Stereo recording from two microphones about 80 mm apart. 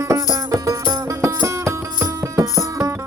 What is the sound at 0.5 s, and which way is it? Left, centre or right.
Music, right.